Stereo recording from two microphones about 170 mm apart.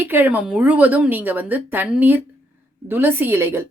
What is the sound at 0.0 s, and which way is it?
Speech, 10° right (ahead or behind).